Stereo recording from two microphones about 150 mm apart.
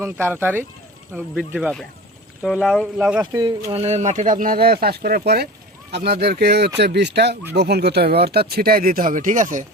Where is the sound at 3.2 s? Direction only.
25° right (ahead or behind).